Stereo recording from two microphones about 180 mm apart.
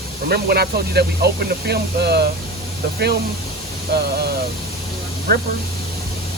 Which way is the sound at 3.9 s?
65° right (ahead or behind).